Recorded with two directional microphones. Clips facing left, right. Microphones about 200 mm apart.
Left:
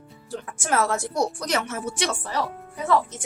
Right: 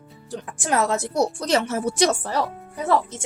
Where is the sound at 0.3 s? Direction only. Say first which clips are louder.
Right 1 dB; 20° right (ahead or behind).